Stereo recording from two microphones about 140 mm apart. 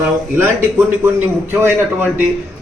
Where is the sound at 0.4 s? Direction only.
10° right (ahead or behind).